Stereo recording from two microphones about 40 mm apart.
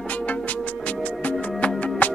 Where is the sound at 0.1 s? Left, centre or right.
Left.